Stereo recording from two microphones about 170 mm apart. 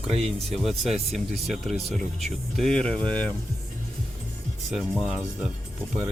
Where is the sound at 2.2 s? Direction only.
5° left (ahead or behind).